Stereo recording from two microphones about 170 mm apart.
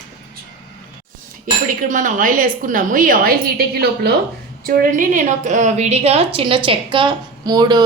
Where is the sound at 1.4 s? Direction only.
50° right (ahead or behind); by 4.1 s 70° right (ahead or behind).